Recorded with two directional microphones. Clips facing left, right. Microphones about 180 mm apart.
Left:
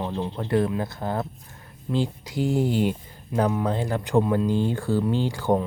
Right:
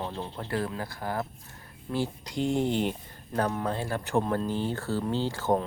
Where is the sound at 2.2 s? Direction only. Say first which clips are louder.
Left 2 dB; 5° left (ahead or behind).